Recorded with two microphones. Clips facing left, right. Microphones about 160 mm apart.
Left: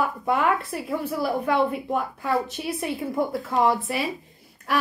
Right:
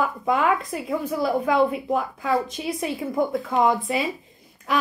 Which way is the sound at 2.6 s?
5° right (ahead or behind).